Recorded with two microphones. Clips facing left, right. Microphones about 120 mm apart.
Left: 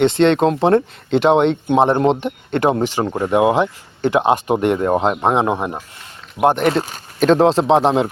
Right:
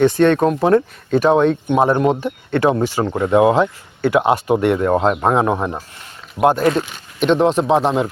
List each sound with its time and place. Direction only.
0.0 s speech: 20° left (ahead or behind)
6.7 s speech: 40° left (ahead or behind)